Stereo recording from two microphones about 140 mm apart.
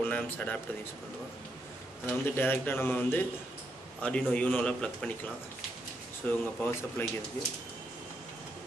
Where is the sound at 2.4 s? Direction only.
15° left (ahead or behind).